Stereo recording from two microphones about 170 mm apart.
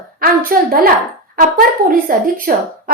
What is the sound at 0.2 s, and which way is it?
A woman's voice, 55° right (ahead or behind).